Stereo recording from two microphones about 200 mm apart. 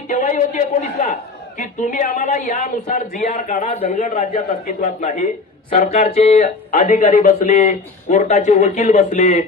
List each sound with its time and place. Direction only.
0.1 s speech: 40° left (ahead or behind)